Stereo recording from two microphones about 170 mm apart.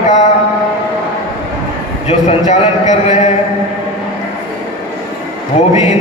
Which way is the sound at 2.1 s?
40° left (ahead or behind).